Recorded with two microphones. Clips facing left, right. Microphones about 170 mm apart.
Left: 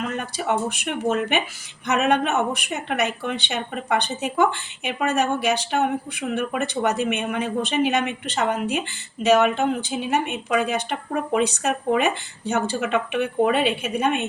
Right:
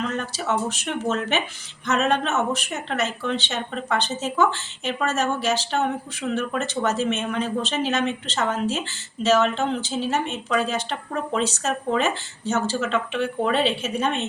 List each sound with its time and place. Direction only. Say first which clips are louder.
0.0 s speech: even; 10° left (ahead or behind)